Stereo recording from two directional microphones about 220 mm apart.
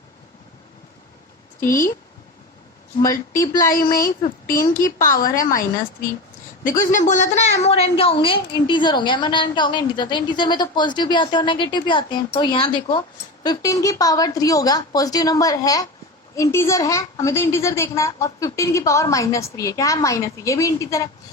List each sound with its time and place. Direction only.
1.6 s a woman's voice: 40° left (ahead or behind)
3.0 s a woman's voice: 15° left (ahead or behind)
3.5 s a woman's voice: 40° left (ahead or behind)
7.1 s a woman's voice: 30° left (ahead or behind); by 21.1 s 15° left (ahead or behind)